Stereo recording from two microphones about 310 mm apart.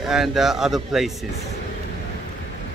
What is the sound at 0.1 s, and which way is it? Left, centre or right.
Speech, centre.